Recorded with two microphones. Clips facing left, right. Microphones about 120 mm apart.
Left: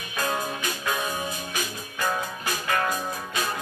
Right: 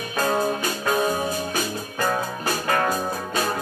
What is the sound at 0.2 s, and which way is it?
Music, 40° right (ahead or behind).